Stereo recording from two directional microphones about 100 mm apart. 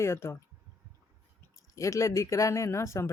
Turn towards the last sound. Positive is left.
turn(degrees=30)  # may be behind; listen again after turning